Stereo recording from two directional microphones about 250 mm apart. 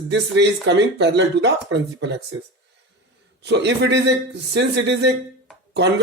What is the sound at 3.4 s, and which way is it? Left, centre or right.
Speech, right.